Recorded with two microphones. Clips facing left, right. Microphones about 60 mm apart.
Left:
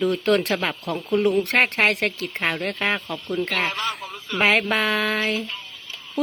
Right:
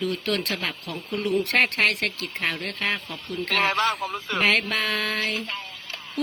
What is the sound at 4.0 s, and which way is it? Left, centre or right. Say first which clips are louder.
Speech: right 5 dB; right.